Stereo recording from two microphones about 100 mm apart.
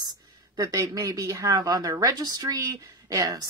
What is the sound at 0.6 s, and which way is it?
Speech, 35° right (ahead or behind).